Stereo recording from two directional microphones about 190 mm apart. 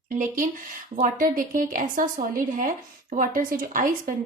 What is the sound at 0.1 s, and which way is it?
A woman's voice, 45° right (ahead or behind).